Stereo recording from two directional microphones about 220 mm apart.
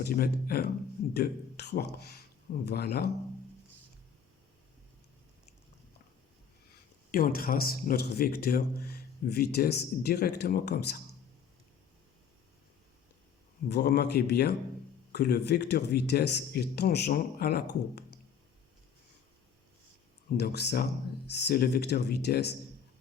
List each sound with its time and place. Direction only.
0.0 s speech: 45° left (ahead or behind)
7.1 s speech: 40° left (ahead or behind)
13.7 s speech: 50° left (ahead or behind)
20.3 s speech: 50° left (ahead or behind)